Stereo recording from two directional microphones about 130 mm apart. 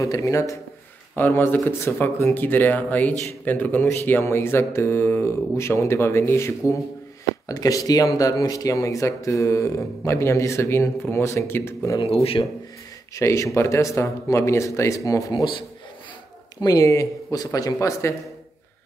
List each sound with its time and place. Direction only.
0.0 s speech: 25° left (ahead or behind)
12.0 s speech: 50° left (ahead or behind)
13.1 s speech: 25° left (ahead or behind)
16.6 s speech: 25° left (ahead or behind)